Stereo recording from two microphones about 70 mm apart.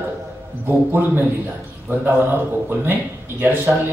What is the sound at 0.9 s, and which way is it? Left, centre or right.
A man's voice, right.